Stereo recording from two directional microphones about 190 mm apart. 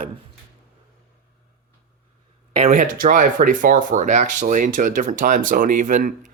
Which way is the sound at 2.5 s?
30° right (ahead or behind).